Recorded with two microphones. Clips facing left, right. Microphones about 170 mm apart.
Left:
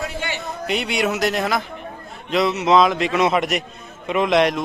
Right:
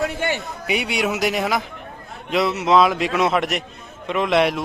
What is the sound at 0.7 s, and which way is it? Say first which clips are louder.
A man's voice: even; 5° right (ahead or behind).